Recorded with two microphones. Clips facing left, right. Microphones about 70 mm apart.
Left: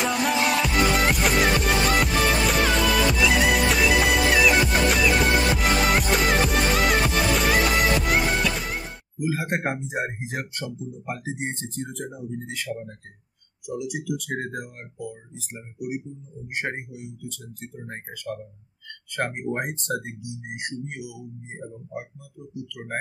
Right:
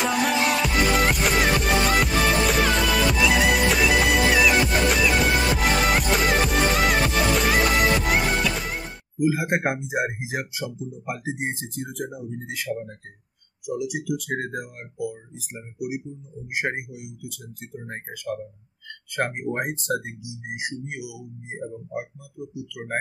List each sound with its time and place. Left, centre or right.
0.0 s music: centre
9.2 s speech: centre
22.8 s speech: right